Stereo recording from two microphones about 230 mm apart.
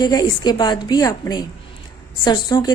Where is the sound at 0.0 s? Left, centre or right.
Centre.